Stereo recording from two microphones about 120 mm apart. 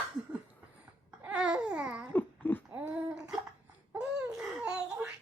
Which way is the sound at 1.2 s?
10° right (ahead or behind).